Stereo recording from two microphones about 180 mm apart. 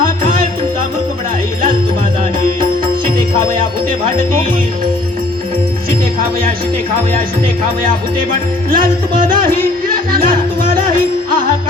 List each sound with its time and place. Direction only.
8.3 s music: 50° right (ahead or behind)